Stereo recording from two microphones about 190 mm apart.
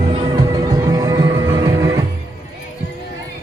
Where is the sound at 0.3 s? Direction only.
20° right (ahead or behind).